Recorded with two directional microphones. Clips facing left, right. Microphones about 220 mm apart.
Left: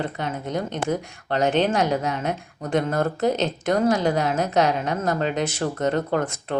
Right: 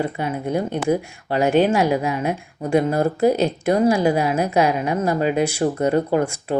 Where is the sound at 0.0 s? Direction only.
10° right (ahead or behind).